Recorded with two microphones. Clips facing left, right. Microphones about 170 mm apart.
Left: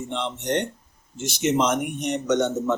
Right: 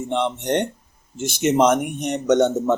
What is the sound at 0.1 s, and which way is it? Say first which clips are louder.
A man's voice: right 5 dB; 55° right (ahead or behind).